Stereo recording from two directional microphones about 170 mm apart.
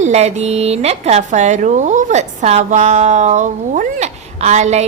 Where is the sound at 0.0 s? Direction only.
40° right (ahead or behind).